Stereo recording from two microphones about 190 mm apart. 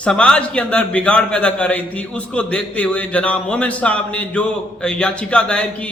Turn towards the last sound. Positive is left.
turn(degrees=5)  # may be behind; listen again after turning